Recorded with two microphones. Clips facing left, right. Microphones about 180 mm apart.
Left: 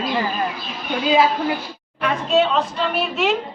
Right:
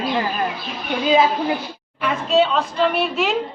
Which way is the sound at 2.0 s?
Centre (ahead or behind).